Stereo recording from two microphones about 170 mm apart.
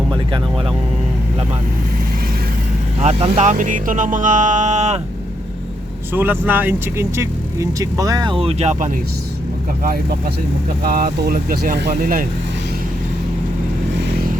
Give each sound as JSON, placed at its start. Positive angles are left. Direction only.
{"t": 3.0, "sound": "speech", "side_deg": -40}
{"t": 6.1, "sound": "speech", "side_deg": -10}
{"t": 10.8, "sound": "speech", "side_deg": -60}
{"t": 14.0, "sound": "vehicle", "side_deg": -70}